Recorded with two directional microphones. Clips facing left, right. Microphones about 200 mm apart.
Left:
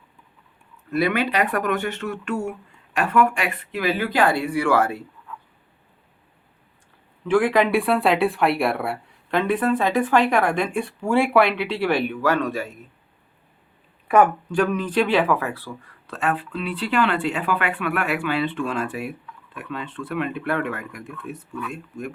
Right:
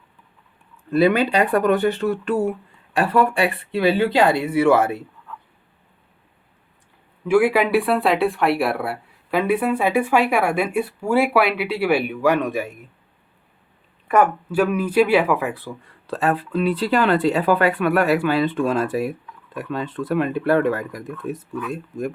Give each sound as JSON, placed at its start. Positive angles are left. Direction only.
{"t": 0.9, "sound": "speech", "side_deg": -30}
{"t": 7.3, "sound": "speech", "side_deg": -10}
{"t": 14.5, "sound": "speech", "side_deg": -5}
{"t": 16.0, "sound": "speech", "side_deg": -35}